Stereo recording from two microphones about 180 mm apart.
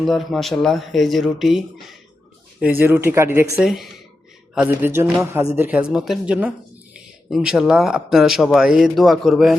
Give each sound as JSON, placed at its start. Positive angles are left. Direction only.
{"t": 0.0, "sound": "speech", "side_deg": 0}
{"t": 3.6, "sound": "speech", "side_deg": 0}